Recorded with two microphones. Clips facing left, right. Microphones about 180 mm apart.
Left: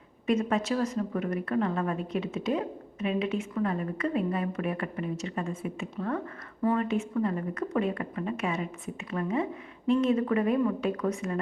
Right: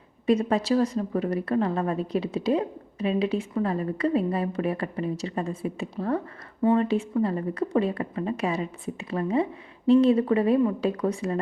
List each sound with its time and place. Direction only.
0.3 s a woman's voice: 35° right (ahead or behind)